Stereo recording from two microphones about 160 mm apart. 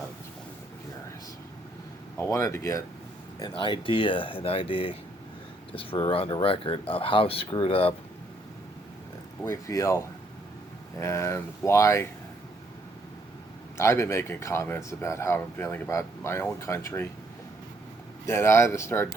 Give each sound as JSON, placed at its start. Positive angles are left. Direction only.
{"t": 2.1, "sound": "speech", "side_deg": 15}
{"t": 3.4, "sound": "speech", "side_deg": 30}
{"t": 9.4, "sound": "speech", "side_deg": 20}
{"t": 13.7, "sound": "speech", "side_deg": 15}
{"t": 18.3, "sound": "speech", "side_deg": 15}